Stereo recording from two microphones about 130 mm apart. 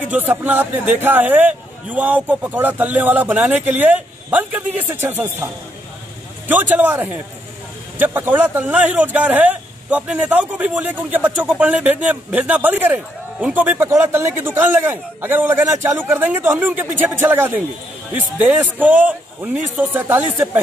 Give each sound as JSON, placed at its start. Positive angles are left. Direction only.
{"t": 0.1, "sound": "speech", "side_deg": -15}